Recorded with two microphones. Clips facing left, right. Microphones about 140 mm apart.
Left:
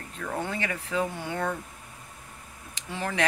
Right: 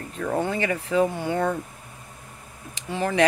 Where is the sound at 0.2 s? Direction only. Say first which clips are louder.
Right 7 dB; 30° right (ahead or behind).